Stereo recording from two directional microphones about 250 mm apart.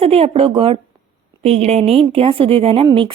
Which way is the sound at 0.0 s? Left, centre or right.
Right.